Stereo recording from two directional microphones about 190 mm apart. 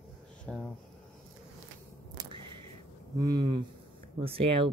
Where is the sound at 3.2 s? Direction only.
20° right (ahead or behind).